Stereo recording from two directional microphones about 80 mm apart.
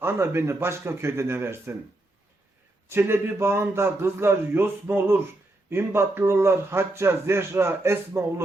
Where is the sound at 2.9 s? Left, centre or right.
Right.